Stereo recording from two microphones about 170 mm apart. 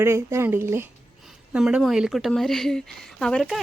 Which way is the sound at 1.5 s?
5° right (ahead or behind).